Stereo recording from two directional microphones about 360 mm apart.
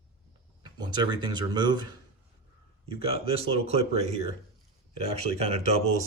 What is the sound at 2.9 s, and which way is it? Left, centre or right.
Speech, centre.